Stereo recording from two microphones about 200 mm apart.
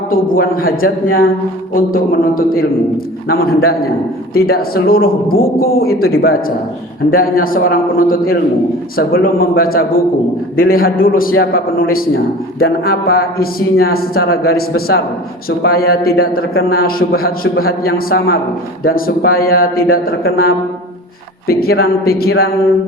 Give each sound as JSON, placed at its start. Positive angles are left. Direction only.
{"t": 0.1, "sound": "a man's voice", "side_deg": 45}